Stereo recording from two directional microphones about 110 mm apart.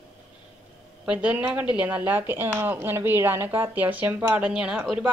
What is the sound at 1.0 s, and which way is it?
Speech, 10° right (ahead or behind).